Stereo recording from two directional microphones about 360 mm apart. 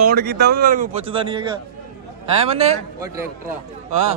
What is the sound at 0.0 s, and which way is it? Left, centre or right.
Speech, right.